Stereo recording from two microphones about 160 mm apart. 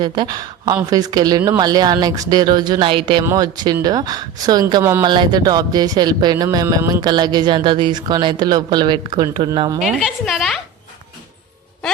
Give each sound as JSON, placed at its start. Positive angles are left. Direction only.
{"t": 0.0, "sound": "speech", "side_deg": -25}
{"t": 5.0, "sound": "speech", "side_deg": -30}
{"t": 9.8, "sound": "a woman's voice", "side_deg": 0}